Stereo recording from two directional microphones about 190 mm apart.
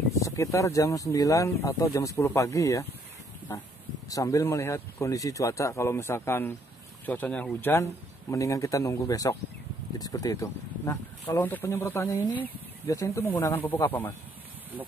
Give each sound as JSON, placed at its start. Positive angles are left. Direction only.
{"t": 0.1, "sound": "speech", "side_deg": 15}
{"t": 4.1, "sound": "speech", "side_deg": 15}